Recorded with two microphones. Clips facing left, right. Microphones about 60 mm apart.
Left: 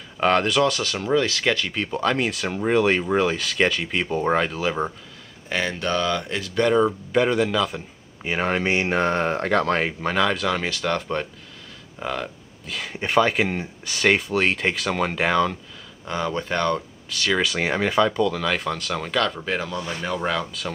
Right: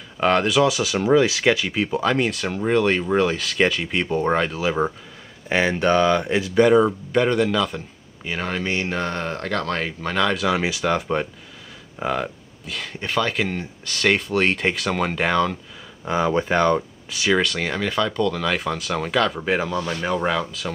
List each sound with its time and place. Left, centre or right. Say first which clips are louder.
0.2 s speech: right 1 dB; centre
5.5 s speech: right 6 dB; right; by 7.8 s centre
8.2 s speech: left 3 dB; left; by 12.3 s centre
12.6 s speech: left 1 dB; centre
16.1 s speech: right 5 dB; centre
17.6 s speech: left 3 dB; centre